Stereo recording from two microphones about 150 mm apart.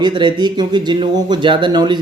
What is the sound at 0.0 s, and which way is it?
Speech, 30° right (ahead or behind).